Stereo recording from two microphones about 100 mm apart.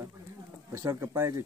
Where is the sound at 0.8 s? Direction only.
25° right (ahead or behind).